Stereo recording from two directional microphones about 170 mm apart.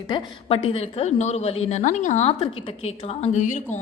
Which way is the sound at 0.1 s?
35° left (ahead or behind).